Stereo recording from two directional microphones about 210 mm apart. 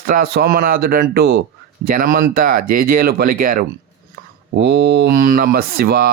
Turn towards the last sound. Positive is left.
turn(degrees=-45)  # may be behind; listen again after turning